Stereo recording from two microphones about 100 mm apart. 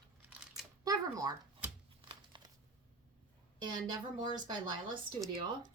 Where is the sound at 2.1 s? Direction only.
50° right (ahead or behind).